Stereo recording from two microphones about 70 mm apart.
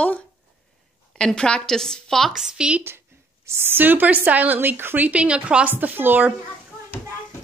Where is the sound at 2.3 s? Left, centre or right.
Centre.